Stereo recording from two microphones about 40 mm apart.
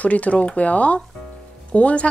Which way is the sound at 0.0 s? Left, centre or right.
Left.